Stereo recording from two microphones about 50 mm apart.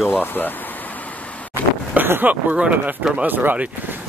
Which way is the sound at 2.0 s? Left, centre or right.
Right.